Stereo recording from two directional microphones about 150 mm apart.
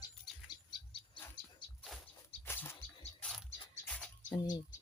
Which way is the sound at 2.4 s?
15° left (ahead or behind).